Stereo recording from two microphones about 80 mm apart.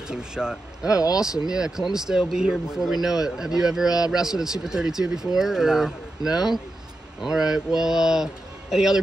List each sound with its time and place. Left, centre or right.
0.1 s speech: centre
0.9 s speech: left
1.2 s speech: centre